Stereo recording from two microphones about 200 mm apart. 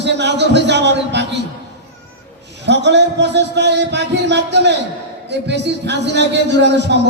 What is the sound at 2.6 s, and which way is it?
A man's voice, 60° right (ahead or behind).